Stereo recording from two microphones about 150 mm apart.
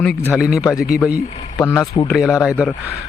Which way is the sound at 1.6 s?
20° left (ahead or behind).